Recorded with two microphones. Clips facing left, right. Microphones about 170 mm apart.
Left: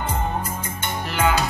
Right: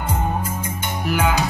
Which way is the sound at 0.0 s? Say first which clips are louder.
Right 2 dB; 10° right (ahead or behind).